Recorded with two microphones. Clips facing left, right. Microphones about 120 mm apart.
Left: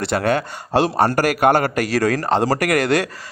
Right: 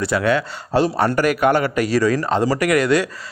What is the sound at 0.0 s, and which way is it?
Speech, 60° left (ahead or behind).